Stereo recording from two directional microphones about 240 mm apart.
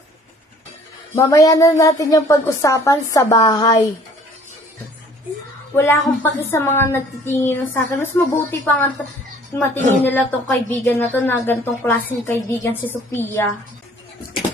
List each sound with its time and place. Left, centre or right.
1.1 s speech: centre
5.7 s speech: centre
10.0 s speech: centre